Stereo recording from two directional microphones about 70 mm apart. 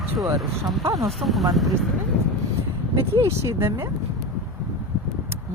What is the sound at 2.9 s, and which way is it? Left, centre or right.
Speech, right.